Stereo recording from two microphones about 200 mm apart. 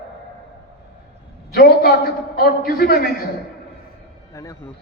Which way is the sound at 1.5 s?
50° left (ahead or behind).